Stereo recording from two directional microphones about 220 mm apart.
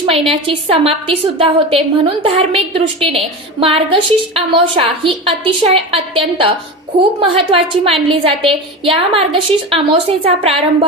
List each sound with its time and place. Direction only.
0.0 s a woman's voice: 25° right (ahead or behind)